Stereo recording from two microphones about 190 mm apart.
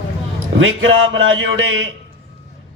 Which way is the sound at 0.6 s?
90° right.